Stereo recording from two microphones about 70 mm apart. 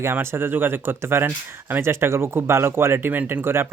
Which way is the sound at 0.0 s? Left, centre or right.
Right.